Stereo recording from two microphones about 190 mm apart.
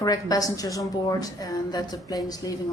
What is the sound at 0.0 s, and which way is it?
Speech, 20° left (ahead or behind).